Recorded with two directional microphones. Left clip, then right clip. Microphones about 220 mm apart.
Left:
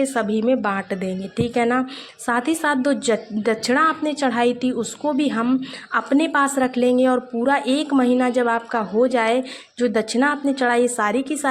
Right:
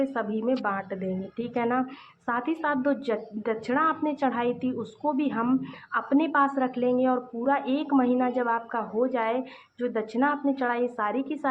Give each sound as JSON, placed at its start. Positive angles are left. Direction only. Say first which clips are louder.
{"t": 0.0, "sound": "a woman's voice", "louder": "left 7 dB", "side_deg": 30}